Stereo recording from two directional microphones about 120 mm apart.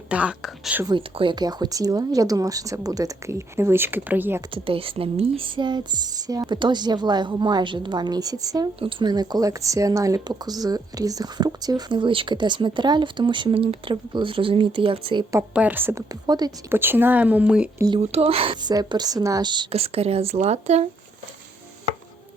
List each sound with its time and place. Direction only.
0.1 s speech: 10° right (ahead or behind)
0.9 s speech: 45° right (ahead or behind); by 4.4 s 15° right (ahead or behind)
4.5 s speech: 50° right (ahead or behind); by 8.7 s 30° right (ahead or behind)
8.8 s speech: 45° right (ahead or behind)
15.5 s speech: 15° right (ahead or behind)
16.2 s speech: 35° right (ahead or behind)
16.6 s speech: 20° right (ahead or behind)
18.0 s speech: 60° right (ahead or behind); by 19.6 s 35° right (ahead or behind)
19.7 s speech: 55° right (ahead or behind)